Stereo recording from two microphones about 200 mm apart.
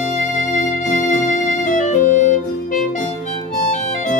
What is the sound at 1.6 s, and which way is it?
Music, 40° left (ahead or behind).